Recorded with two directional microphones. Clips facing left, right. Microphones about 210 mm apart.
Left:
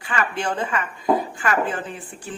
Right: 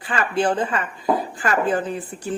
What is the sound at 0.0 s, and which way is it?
A woman's voice, 35° right (ahead or behind).